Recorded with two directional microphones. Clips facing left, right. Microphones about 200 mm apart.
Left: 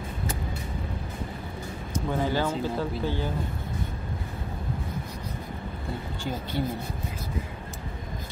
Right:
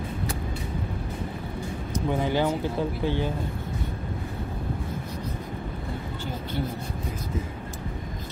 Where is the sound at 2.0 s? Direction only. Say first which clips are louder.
Right 2 dB; 20° right (ahead or behind).